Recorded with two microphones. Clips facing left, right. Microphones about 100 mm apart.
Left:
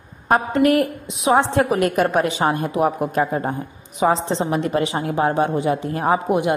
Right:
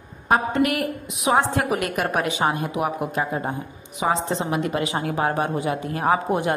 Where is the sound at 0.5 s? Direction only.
35° left (ahead or behind).